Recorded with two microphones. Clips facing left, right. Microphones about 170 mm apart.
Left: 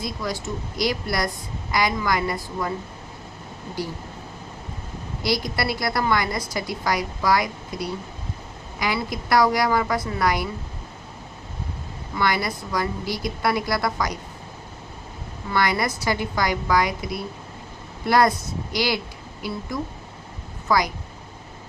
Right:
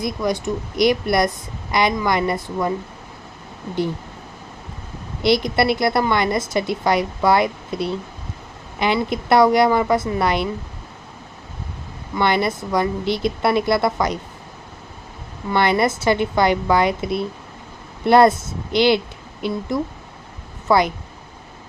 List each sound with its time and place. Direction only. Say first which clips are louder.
0.0 s a woman's voice: right 7 dB; 20° right (ahead or behind)
5.2 s a woman's voice: right 8 dB; 25° right (ahead or behind)
12.1 s a woman's voice: right 5 dB; 25° right (ahead or behind)
15.5 s a woman's voice: right 5 dB; 25° right (ahead or behind)